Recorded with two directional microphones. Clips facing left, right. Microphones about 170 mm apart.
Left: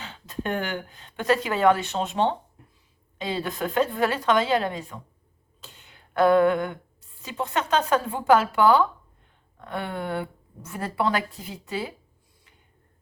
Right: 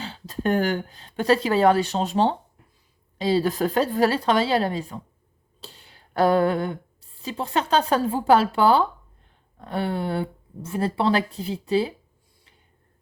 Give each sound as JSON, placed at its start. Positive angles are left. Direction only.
{"t": 0.0, "sound": "speech", "side_deg": -35}